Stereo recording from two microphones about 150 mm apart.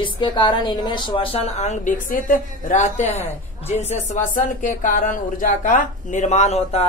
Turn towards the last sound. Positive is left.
turn(degrees=45)  # may be behind; listen again after turning